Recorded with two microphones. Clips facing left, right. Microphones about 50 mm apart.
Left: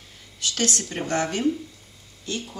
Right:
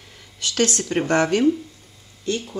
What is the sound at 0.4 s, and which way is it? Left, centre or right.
Speech, right.